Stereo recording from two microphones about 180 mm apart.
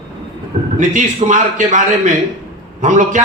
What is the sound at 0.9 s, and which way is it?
A man's voice, 45° right (ahead or behind).